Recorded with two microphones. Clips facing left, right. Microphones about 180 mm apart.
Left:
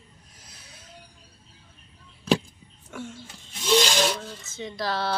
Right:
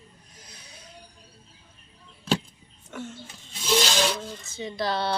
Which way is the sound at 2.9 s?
10° left (ahead or behind).